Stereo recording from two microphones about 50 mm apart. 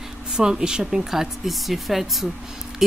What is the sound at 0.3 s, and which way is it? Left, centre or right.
Speech, centre.